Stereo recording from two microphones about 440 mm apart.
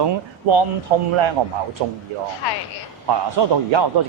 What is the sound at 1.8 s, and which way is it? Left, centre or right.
Speech, right.